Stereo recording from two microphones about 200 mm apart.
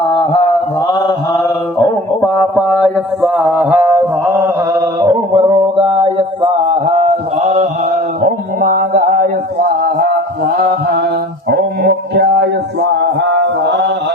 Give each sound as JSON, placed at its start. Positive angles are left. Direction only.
{"t": 0.1, "sound": "mantra", "side_deg": 25}
{"t": 1.8, "sound": "mantra", "side_deg": 10}
{"t": 8.2, "sound": "a sound", "side_deg": -45}
{"t": 13.0, "sound": "mantra", "side_deg": -60}